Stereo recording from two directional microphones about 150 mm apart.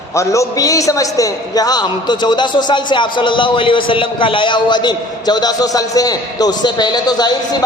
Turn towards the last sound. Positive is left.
turn(degrees=25)  # may be behind; listen again after turning